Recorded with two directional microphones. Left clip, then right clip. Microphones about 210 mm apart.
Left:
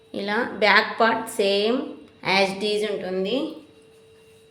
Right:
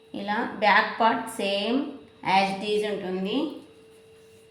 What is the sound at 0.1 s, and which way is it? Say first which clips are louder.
A woman's voice: left 3 dB; 50° left (ahead or behind).